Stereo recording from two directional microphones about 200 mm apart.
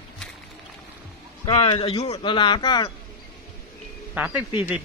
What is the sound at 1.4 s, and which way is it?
A man's voice, 25° left (ahead or behind).